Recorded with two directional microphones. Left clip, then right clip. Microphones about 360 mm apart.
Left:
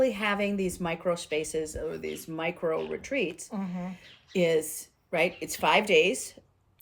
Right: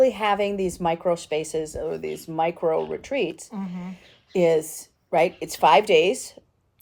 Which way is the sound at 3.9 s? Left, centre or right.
Centre.